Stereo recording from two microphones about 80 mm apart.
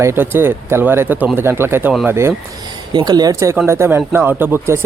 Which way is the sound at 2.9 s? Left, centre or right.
Right.